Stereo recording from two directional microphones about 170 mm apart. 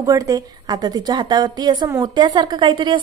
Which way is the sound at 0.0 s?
20° right (ahead or behind).